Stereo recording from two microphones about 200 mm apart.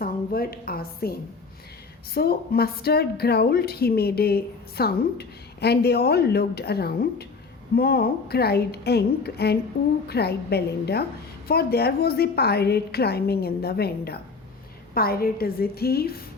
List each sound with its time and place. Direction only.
0.0 s a woman's voice: 50° left (ahead or behind)
2.1 s a woman's voice: 50° left (ahead or behind)